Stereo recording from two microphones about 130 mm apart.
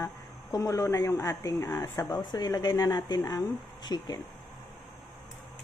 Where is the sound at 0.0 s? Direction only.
25° left (ahead or behind).